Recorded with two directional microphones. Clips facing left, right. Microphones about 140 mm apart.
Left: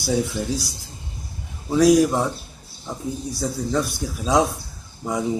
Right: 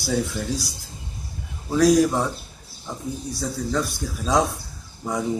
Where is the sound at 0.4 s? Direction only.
15° left (ahead or behind).